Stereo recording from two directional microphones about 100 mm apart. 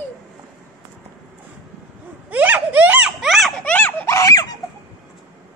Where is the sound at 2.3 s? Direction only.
15° right (ahead or behind).